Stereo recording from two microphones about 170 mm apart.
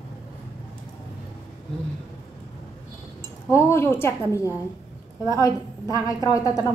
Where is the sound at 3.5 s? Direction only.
15° left (ahead or behind).